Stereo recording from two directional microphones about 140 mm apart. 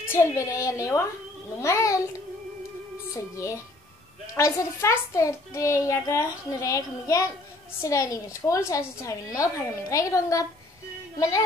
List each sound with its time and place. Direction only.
0.1 s a child's voice: 20° left (ahead or behind)
3.1 s a child's voice: 20° left (ahead or behind)